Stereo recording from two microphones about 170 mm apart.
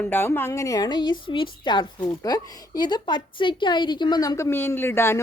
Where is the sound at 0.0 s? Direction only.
10° left (ahead or behind).